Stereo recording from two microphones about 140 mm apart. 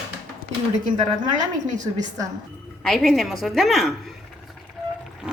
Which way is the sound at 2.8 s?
Centre (ahead or behind).